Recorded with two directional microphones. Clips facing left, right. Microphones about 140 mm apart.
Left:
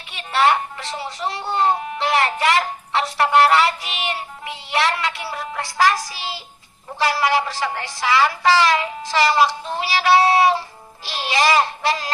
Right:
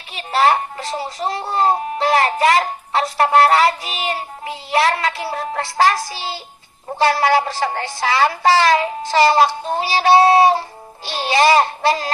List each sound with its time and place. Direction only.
0.1 s a child's voice: 35° right (ahead or behind)